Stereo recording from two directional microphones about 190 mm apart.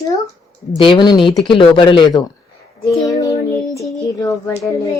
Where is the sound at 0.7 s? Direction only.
25° left (ahead or behind).